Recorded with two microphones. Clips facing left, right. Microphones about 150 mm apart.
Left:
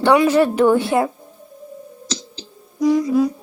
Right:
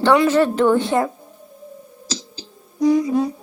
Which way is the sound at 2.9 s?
Centre (ahead or behind).